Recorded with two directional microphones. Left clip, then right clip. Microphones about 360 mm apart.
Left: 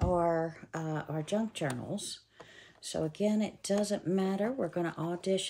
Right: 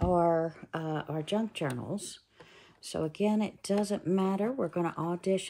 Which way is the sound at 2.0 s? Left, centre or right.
Centre.